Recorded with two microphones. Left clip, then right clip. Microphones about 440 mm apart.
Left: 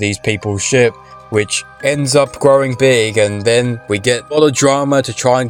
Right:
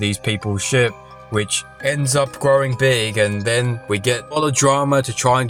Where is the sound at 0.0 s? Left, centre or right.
Right.